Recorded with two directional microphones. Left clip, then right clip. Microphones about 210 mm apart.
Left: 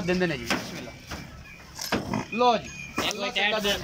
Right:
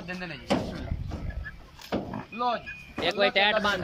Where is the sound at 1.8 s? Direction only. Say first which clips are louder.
Left 5 dB; 40° left (ahead or behind).